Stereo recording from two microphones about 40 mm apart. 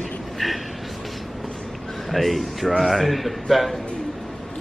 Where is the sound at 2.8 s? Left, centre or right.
Centre.